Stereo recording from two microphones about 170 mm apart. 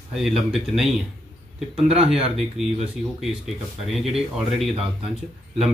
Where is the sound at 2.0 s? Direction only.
5° right (ahead or behind).